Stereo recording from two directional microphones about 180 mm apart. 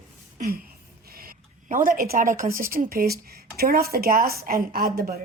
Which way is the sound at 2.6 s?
50° right (ahead or behind).